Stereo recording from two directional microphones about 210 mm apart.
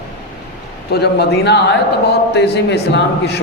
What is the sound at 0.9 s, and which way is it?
A man's voice, 50° left (ahead or behind).